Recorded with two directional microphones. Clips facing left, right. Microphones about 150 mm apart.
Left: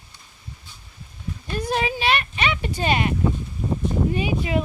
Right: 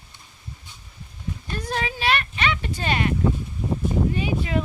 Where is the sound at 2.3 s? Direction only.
15° left (ahead or behind).